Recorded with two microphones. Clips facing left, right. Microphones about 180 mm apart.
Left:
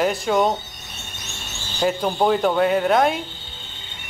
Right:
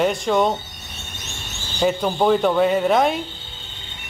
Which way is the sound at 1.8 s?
Centre (ahead or behind).